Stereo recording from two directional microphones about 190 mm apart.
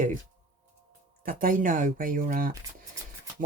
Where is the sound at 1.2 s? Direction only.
45° right (ahead or behind).